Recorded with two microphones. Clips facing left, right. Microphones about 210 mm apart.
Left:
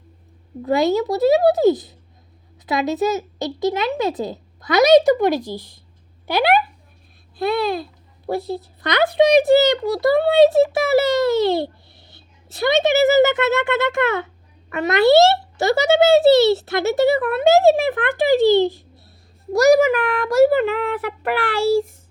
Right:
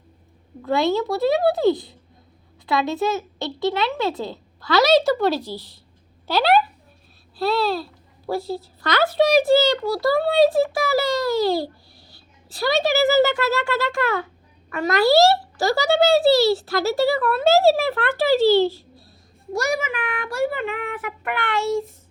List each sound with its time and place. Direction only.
0.6 s a child's voice: 20° left (ahead or behind)
19.5 s speech: 40° left (ahead or behind)